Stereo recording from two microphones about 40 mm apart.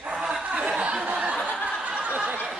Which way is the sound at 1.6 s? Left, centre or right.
Right.